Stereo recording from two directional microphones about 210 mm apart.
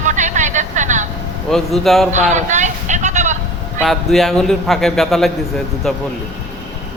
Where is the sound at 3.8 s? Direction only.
Centre (ahead or behind).